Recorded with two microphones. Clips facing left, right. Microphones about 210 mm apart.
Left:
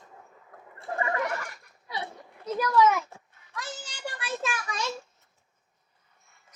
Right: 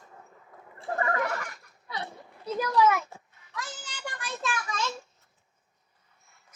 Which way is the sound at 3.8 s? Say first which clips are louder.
Left 2 dB; 10° left (ahead or behind).